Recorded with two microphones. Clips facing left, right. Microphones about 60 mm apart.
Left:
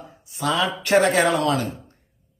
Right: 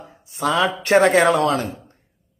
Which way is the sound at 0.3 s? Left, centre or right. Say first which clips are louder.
Right 3 dB; right.